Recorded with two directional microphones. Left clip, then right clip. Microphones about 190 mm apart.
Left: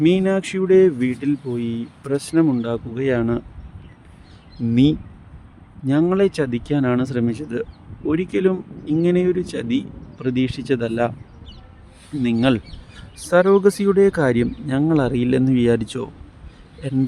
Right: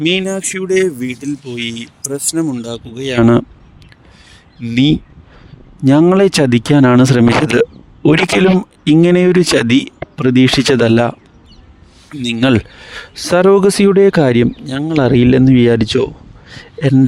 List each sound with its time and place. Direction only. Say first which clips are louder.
0.0 s speech: right 3 dB; 45° right (ahead or behind)
0.3 s speech: even; centre (ahead or behind)
3.0 s speech: right 9 dB; 60° right (ahead or behind)
4.6 s speech: right 5 dB; 55° right (ahead or behind)
12.2 s speech: right 6 dB; 60° right (ahead or behind)
13.0 s speech: right 4 dB; 45° right (ahead or behind)